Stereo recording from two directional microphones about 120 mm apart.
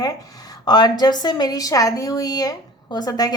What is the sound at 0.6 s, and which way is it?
A woman's voice, 35° left (ahead or behind).